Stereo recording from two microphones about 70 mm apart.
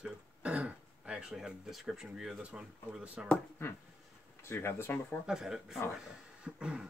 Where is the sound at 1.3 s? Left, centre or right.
Centre.